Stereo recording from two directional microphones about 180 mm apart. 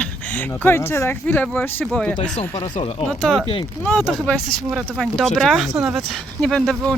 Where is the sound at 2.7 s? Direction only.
35° left (ahead or behind).